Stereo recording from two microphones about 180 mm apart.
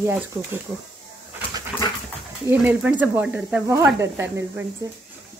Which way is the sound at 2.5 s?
10° right (ahead or behind).